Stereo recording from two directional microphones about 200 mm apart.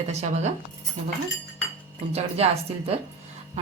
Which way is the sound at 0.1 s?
35° right (ahead or behind).